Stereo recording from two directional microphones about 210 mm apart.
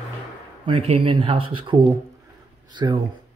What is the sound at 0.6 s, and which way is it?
Speech, 25° right (ahead or behind).